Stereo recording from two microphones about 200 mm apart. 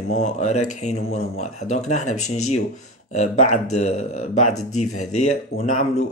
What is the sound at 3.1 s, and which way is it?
Speech, 35° left (ahead or behind).